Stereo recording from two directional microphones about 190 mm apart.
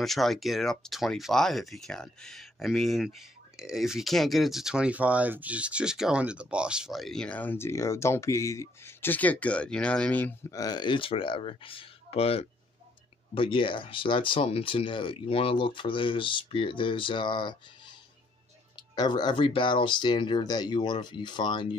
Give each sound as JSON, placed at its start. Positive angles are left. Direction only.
{"t": 0.0, "sound": "speech", "side_deg": 0}
{"t": 18.9, "sound": "speech", "side_deg": 20}